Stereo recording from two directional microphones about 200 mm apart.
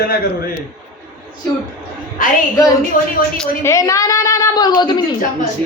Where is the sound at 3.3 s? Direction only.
5° left (ahead or behind).